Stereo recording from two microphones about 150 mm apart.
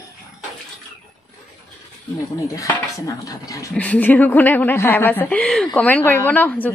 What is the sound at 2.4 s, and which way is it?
A woman's voice, 20° left (ahead or behind).